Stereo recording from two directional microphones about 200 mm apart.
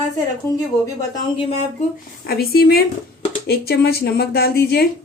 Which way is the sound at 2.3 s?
50° left (ahead or behind).